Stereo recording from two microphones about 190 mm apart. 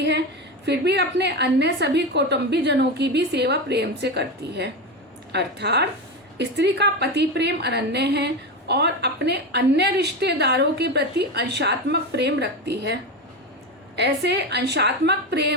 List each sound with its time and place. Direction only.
0.6 s a woman's voice: 65° right (ahead or behind)